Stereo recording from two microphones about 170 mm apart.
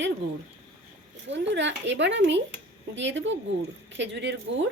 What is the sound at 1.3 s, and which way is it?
A woman's voice, 90° right.